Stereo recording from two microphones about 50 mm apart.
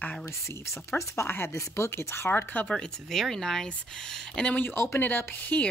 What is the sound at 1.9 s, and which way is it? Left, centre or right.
Speech, left.